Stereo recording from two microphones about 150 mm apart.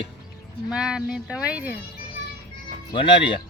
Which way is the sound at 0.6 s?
5° right (ahead or behind).